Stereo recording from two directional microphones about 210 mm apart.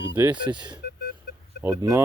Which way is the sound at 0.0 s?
10° right (ahead or behind).